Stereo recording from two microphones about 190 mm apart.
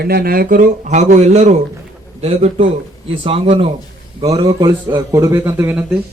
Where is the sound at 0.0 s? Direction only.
55° right (ahead or behind); by 3.7 s 30° right (ahead or behind).